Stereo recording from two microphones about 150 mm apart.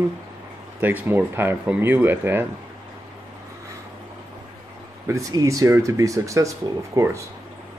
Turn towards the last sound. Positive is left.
turn(degrees=-20)  # may be behind; listen again after turning